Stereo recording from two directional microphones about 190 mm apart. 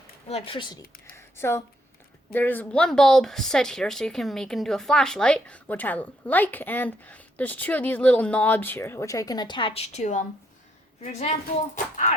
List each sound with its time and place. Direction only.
0.3 s speech: 30° left (ahead or behind)
1.1 s speech: 15° left (ahead or behind); by 12.1 s 40° left (ahead or behind)